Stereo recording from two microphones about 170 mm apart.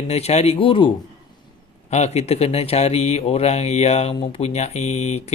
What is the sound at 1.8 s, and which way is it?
Speech, 40° left (ahead or behind).